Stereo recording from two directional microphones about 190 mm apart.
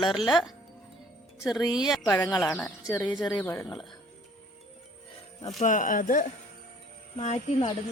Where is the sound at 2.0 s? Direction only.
15° left (ahead or behind).